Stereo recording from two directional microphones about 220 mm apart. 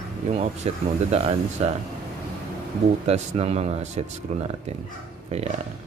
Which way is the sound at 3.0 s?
30° right (ahead or behind).